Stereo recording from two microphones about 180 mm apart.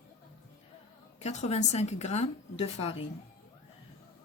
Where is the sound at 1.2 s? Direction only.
40° left (ahead or behind).